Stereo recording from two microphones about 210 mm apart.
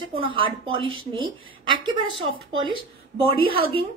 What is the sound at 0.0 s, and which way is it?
A woman's voice, 25° right (ahead or behind).